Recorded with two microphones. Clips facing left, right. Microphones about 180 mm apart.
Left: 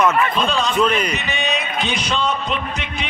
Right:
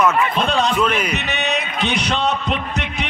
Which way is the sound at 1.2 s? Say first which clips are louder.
Right 1 dB; 65° right (ahead or behind).